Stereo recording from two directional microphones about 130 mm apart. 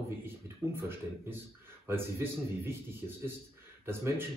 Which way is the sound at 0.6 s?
20° right (ahead or behind).